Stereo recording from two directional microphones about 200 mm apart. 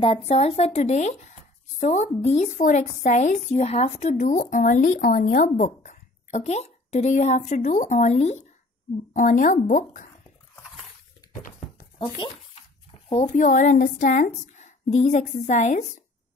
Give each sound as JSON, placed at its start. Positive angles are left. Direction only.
{"t": 0.0, "sound": "a woman's voice", "side_deg": 30}
{"t": 13.1, "sound": "a woman's voice", "side_deg": 40}